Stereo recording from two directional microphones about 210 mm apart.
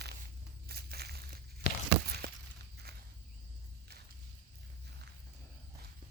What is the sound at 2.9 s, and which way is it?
Walk, 50° right (ahead or behind).